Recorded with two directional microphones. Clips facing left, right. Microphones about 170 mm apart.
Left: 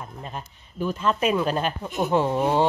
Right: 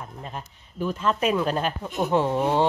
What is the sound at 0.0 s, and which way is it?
Speech, centre (ahead or behind).